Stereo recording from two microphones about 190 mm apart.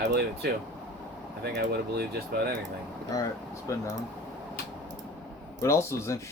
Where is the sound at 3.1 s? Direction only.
20° left (ahead or behind).